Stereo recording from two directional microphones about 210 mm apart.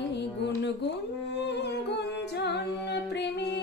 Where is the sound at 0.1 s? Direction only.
50° left (ahead or behind).